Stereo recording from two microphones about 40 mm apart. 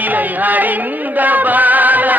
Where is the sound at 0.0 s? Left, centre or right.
Right.